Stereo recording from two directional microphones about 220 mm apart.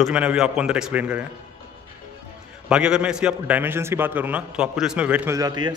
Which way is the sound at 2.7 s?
5° right (ahead or behind).